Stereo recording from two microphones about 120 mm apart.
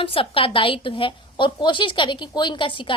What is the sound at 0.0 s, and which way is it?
A woman's voice, 50° left (ahead or behind).